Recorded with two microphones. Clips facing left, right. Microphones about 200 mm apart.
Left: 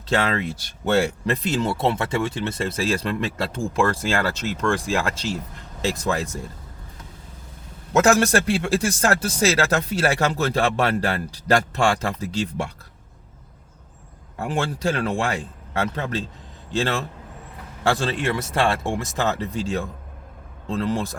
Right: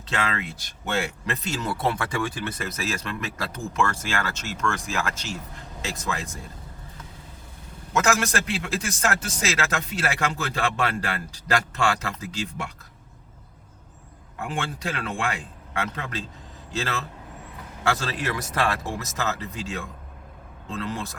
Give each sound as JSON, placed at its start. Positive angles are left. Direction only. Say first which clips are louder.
{"t": 0.1, "sound": "speech", "louder": "left 6 dB", "side_deg": 35}
{"t": 8.0, "sound": "speech", "louder": "left 7 dB", "side_deg": 35}
{"t": 14.3, "sound": "speech", "louder": "left 5 dB", "side_deg": 35}
{"t": 16.7, "sound": "speech", "louder": "left 6 dB", "side_deg": 30}